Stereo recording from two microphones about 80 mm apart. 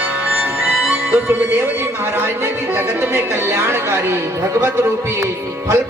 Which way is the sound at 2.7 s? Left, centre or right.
Right.